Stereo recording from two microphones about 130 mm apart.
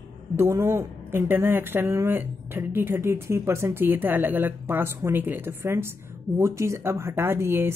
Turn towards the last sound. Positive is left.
turn(degrees=-15)  # may be behind; listen again after turning